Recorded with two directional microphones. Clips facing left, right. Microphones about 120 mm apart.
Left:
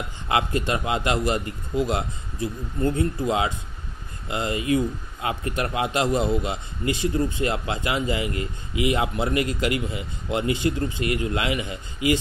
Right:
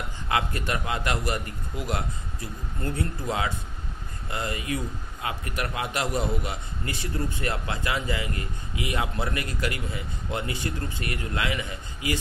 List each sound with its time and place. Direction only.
0.3 s speech: 25° left (ahead or behind)